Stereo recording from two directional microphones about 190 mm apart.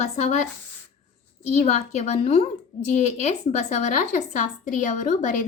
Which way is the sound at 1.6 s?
35° left (ahead or behind).